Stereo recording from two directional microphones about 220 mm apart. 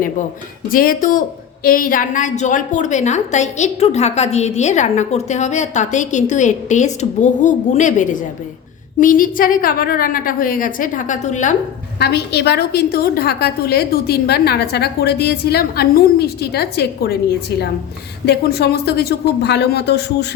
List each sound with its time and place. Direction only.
0.7 s a woman's voice: 40° left (ahead or behind)
11.9 s a woman's voice: 50° left (ahead or behind)
18.3 s a woman's voice: 45° left (ahead or behind)